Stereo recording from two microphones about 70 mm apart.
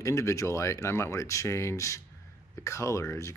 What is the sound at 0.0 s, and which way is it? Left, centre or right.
Speech, left.